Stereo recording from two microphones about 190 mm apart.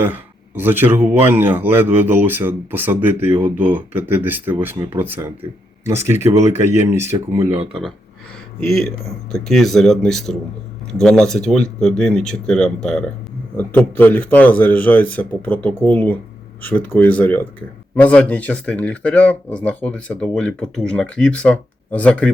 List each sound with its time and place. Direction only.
0.0 s a man's voice: 10° right (ahead or behind)
6.0 s speech: 40° left (ahead or behind)
6.9 s a man's voice: 15° right (ahead or behind)
9.3 s speech: centre (ahead or behind)